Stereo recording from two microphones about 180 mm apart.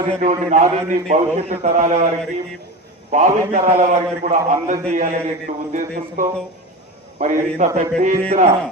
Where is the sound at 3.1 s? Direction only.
45° right (ahead or behind).